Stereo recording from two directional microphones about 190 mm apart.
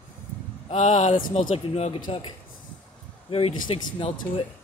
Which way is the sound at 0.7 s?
35° left (ahead or behind).